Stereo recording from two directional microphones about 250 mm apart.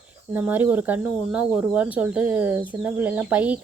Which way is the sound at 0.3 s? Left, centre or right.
Centre.